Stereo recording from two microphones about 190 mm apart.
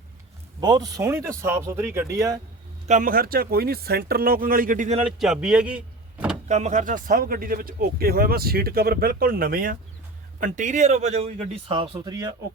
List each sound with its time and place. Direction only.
0.6 s speech: 20° right (ahead or behind)
2.8 s speech: 40° right (ahead or behind)
5.0 s speech: 5° right (ahead or behind)
6.5 s speech: 40° right (ahead or behind); by 12.3 s 20° right (ahead or behind)